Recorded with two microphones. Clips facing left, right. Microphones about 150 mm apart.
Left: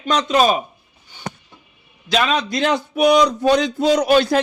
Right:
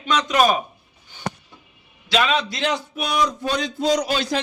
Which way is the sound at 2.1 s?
40° left (ahead or behind).